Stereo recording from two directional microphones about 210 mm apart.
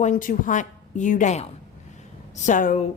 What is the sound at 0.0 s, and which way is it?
Speech, 40° left (ahead or behind).